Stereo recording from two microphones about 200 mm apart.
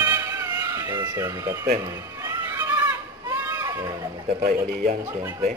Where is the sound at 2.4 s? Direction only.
10° right (ahead or behind).